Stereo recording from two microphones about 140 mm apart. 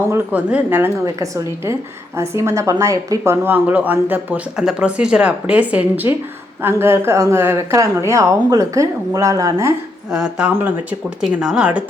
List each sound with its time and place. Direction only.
0.1 s a woman's voice: 10° right (ahead or behind)
10.1 s speech: 5° right (ahead or behind)